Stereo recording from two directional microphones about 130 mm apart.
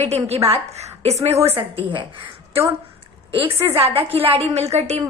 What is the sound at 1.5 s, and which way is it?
A woman's voice, 40° right (ahead or behind).